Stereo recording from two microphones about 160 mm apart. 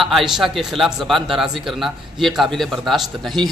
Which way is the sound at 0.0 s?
Centre (ahead or behind).